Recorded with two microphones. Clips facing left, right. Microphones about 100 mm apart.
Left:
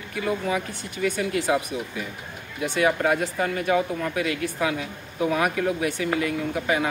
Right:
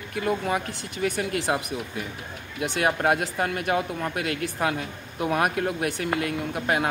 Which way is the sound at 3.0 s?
55° right (ahead or behind).